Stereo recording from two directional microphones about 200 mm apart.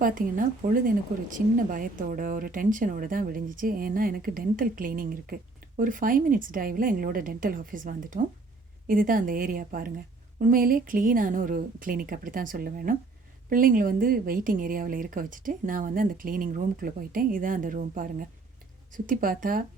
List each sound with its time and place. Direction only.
0.0 s speech: 45° right (ahead or behind)